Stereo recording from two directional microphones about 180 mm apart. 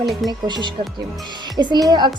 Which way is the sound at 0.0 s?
Centre (ahead or behind).